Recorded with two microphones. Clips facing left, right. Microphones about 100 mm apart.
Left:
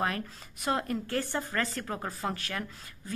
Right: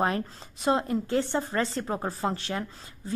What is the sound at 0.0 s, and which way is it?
A woman's voice, 25° right (ahead or behind).